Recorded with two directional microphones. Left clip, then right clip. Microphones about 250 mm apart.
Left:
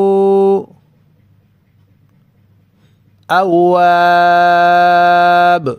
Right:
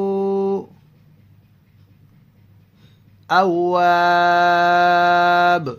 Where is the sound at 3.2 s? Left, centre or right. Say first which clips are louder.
Left 6 dB; left.